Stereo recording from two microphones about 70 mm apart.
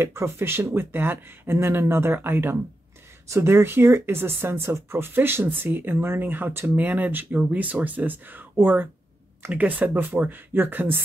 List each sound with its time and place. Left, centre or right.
0.0 s speech: right